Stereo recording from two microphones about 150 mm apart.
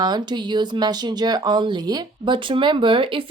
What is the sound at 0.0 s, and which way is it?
Speech, 30° right (ahead or behind).